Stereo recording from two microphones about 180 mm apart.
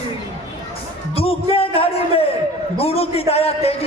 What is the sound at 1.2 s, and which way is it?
A man's voice, 30° left (ahead or behind).